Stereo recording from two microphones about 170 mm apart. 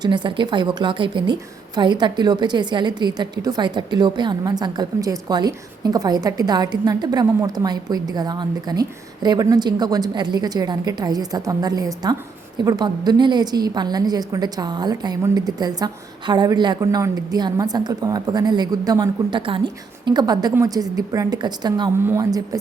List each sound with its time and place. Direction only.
0.0 s a woman's voice: 25° right (ahead or behind)